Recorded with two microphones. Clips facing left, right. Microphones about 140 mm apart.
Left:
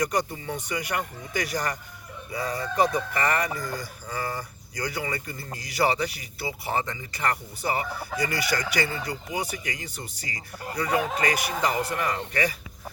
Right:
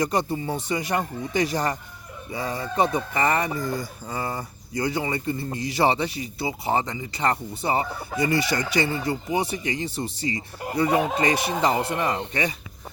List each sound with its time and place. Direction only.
0.0 s speech: 25° right (ahead or behind)